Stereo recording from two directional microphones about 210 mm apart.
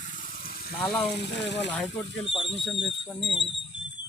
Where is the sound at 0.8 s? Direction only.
5° left (ahead or behind).